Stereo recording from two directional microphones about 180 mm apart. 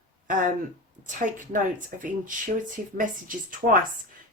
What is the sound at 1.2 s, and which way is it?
Speech, 45° right (ahead or behind).